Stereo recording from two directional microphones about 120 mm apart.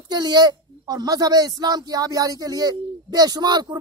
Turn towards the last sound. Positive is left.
turn(degrees=-35)  # may be behind; listen again after turning